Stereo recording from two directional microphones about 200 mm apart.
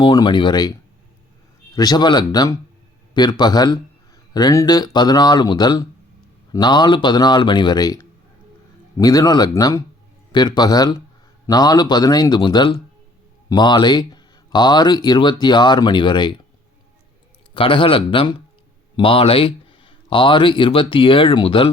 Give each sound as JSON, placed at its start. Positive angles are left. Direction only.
{"t": 0.0, "sound": "speech", "side_deg": 25}
{"t": 17.5, "sound": "speech", "side_deg": 25}